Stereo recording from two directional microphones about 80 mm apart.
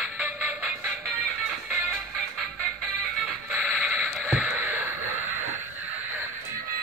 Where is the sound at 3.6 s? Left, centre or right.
Centre.